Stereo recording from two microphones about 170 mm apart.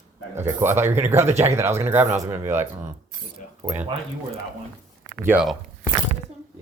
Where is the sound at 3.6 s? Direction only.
15° right (ahead or behind).